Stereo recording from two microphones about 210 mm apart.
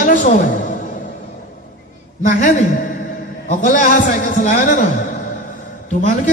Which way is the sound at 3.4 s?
40° left (ahead or behind).